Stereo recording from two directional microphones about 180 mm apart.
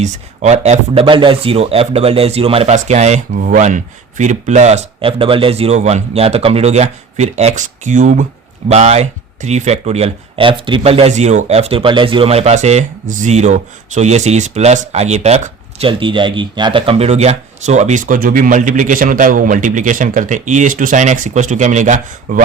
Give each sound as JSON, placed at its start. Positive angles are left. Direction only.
{"t": 0.0, "sound": "speech", "side_deg": -40}